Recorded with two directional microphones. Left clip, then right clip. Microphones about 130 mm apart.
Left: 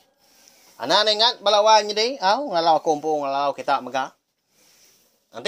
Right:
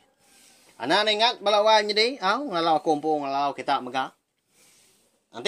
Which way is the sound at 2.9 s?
25° left (ahead or behind).